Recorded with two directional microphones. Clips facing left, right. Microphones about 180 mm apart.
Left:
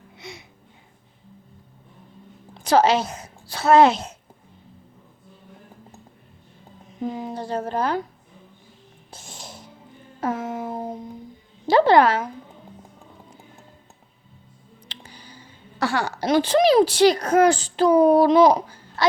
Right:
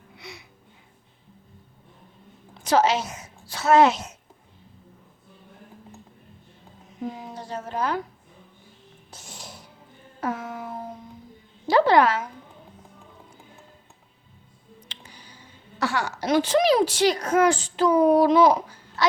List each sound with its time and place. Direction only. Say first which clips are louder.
2.6 s a woman's voice: left 3 dB; 35° left (ahead or behind)
7.3 s speech: left 5 dB; 30° left (ahead or behind)
9.1 s music: left 2 dB; 25° left (ahead or behind)
10.2 s a sound: left 4 dB; 25° left (ahead or behind)
14.9 s music: left 4 dB; 35° left (ahead or behind)
15.8 s speech: left 3 dB; 35° left (ahead or behind)